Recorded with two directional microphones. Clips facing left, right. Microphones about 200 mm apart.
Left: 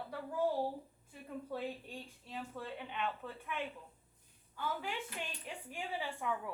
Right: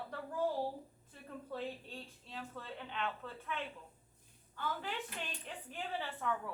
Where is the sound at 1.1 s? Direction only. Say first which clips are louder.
Left 2 dB; 10° left (ahead or behind).